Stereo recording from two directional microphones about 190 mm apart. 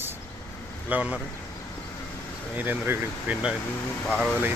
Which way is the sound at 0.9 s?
10° right (ahead or behind).